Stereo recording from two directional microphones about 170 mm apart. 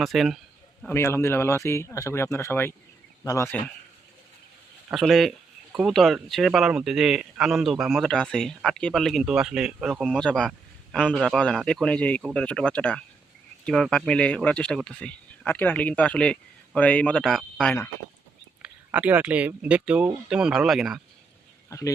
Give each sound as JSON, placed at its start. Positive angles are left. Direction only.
{"t": 0.0, "sound": "speech", "side_deg": 0}
{"t": 0.9, "sound": "speech", "side_deg": 15}
{"t": 4.9, "sound": "speech", "side_deg": 0}
{"t": 18.6, "sound": "speech", "side_deg": -10}
{"t": 21.7, "sound": "speech", "side_deg": 20}